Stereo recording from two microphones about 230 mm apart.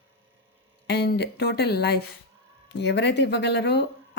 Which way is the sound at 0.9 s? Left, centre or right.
Left.